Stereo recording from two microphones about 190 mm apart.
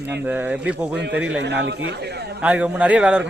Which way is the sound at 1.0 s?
65° right (ahead or behind).